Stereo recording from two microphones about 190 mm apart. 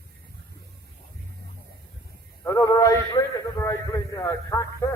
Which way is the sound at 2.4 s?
20° left (ahead or behind).